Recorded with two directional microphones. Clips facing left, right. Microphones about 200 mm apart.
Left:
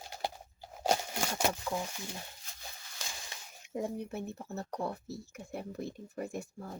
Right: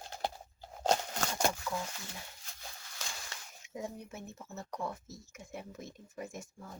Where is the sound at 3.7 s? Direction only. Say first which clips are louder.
Left 6 dB; 35° left (ahead or behind).